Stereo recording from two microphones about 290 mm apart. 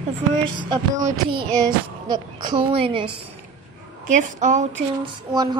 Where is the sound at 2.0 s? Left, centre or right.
Centre.